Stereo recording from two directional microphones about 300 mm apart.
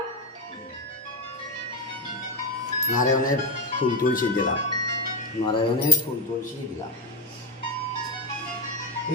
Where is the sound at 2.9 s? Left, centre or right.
Left.